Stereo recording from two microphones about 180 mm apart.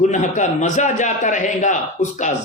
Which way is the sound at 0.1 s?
40° left (ahead or behind).